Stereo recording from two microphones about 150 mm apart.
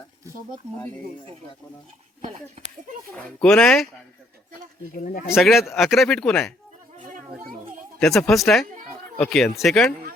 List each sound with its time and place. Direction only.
3.1 s speech: 10° left (ahead or behind)
4.9 s speech: 65° left (ahead or behind)
5.3 s speech: centre (ahead or behind)
7.9 s speech: 5° left (ahead or behind)